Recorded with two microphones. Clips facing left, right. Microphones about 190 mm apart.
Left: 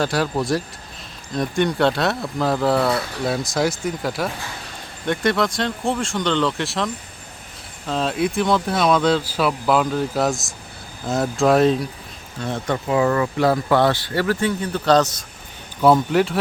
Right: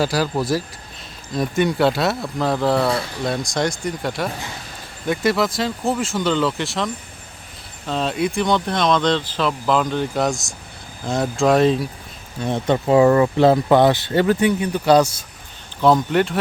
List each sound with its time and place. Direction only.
0.0 s speech: centre (ahead or behind)
12.4 s speech: 20° right (ahead or behind)
15.8 s speech: 5° left (ahead or behind)